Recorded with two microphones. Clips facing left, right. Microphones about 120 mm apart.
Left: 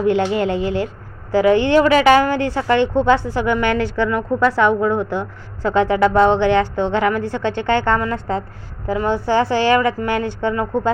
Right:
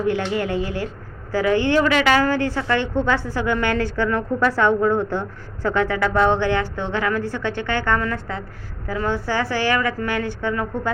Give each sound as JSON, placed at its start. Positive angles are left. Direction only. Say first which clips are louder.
{"t": 0.2, "sound": "a woman's voice", "louder": "left 5 dB", "side_deg": 25}
{"t": 1.8, "sound": "a woman's voice", "louder": "left 6 dB", "side_deg": 35}
{"t": 2.1, "sound": "a woman's voice", "louder": "left 3 dB", "side_deg": 20}